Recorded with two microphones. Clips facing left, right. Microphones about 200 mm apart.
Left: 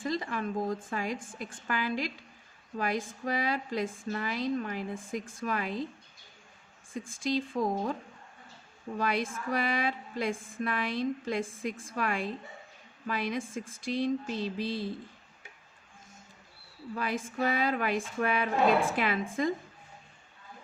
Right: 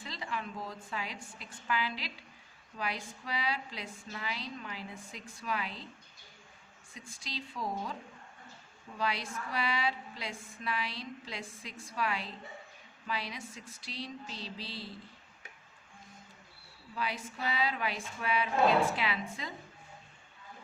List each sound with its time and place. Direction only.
0.0 s a sound: 45° left (ahead or behind)
0.9 s speech: 50° left (ahead or behind)
7.1 s speech: 50° left (ahead or behind)
9.0 s speech: 50° left (ahead or behind)
16.9 s speech: 50° left (ahead or behind)